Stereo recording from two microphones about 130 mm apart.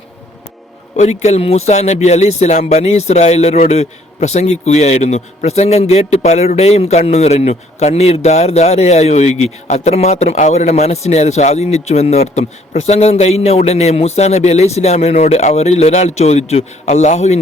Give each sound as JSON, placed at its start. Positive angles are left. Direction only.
{"t": 0.9, "sound": "speech", "side_deg": 60}